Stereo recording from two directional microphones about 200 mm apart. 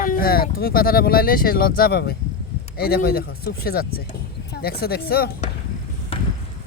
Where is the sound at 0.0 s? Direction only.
45° left (ahead or behind).